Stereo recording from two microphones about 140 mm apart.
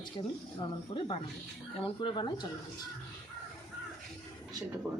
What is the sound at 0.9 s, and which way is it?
Speech, 35° left (ahead or behind).